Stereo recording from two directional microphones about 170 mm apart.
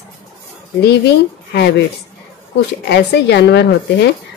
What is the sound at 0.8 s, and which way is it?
Speech, 75° left (ahead or behind).